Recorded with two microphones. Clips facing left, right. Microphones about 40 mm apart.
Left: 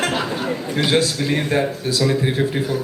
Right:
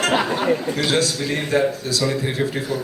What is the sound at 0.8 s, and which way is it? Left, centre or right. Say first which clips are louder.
A man's voice: left 2 dB; left.